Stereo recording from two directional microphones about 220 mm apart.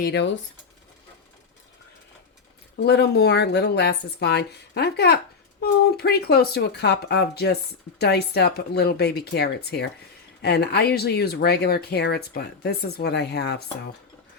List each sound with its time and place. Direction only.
0.0 s speech: 50° left (ahead or behind)
2.7 s speech: 50° left (ahead or behind)